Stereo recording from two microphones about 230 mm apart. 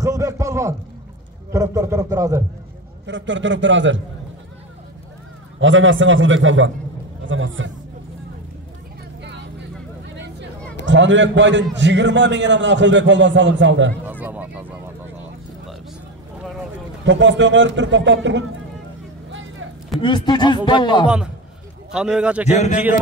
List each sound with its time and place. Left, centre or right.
0.0 s a sound: centre
1.5 s a man's voice: centre
3.1 s a man's voice: right
5.6 s a man's voice: right
10.9 s a man's voice: right
14.0 s a sound: centre
17.0 s a man's voice: right
20.0 s speech: centre
21.9 s a man's voice: centre
22.5 s speech: left